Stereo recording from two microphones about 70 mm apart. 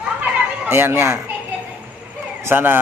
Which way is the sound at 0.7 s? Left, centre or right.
Right.